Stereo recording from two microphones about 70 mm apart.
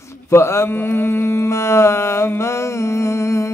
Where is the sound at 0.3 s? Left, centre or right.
Left.